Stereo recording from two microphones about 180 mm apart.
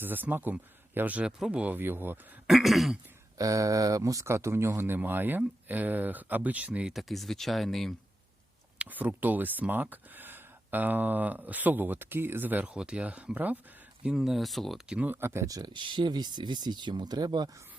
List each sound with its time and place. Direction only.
0.0 s speech: 10° right (ahead or behind)
2.5 s throat clearing: centre (ahead or behind)
3.3 s speech: 20° right (ahead or behind); by 7.9 s centre (ahead or behind)
8.8 s speech: 10° right (ahead or behind)